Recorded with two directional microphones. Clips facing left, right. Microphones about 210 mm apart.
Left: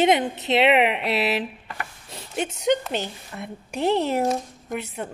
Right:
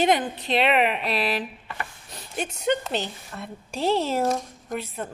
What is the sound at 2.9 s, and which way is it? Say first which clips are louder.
A woman's voice: even; 15° left (ahead or behind).